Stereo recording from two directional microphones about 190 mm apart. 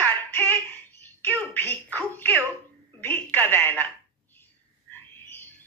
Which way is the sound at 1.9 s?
10° left (ahead or behind).